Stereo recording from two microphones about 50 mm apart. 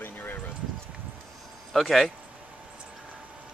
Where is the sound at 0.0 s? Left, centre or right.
Left.